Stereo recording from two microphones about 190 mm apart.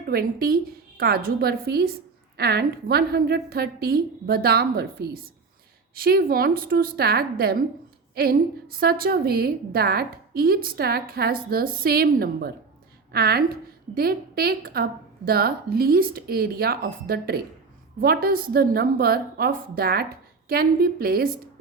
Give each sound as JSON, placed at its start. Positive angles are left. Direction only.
{"t": 0.1, "sound": "a woman's voice", "side_deg": -50}